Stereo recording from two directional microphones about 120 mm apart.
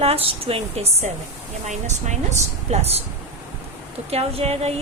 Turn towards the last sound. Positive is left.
turn(degrees=-60)  # may be behind; listen again after turning